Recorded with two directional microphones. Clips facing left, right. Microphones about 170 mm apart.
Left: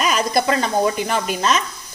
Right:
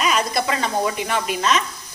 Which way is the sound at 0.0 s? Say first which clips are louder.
Left 2 dB; 40° left (ahead or behind).